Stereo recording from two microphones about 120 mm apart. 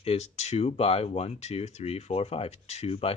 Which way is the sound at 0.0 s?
60° left (ahead or behind).